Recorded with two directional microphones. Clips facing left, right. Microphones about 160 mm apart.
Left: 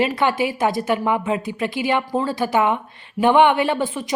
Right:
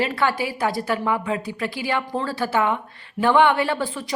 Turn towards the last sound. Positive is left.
turn(degrees=20)  # may be behind; listen again after turning